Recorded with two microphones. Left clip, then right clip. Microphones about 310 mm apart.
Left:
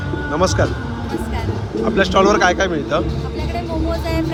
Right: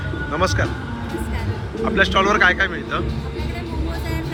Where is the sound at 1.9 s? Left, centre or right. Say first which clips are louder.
Left 2 dB; centre.